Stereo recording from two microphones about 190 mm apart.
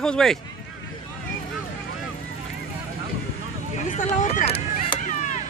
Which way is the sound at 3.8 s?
40° left (ahead or behind).